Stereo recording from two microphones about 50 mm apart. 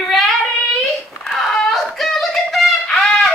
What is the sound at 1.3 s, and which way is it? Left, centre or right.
Music, centre.